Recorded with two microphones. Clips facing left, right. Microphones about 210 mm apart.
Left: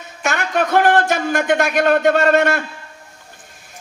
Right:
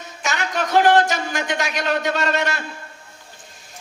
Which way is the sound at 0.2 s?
55° left (ahead or behind).